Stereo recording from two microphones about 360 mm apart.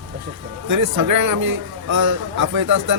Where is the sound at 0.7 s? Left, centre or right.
Right.